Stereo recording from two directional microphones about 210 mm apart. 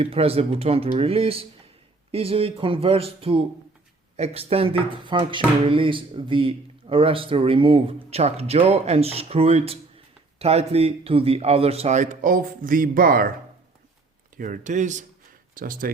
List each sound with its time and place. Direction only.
0.0 s speech: 25° right (ahead or behind); by 13.3 s 45° right (ahead or behind)
14.3 s speech: 40° right (ahead or behind)